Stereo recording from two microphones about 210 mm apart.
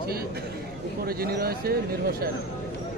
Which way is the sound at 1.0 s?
45° right (ahead or behind).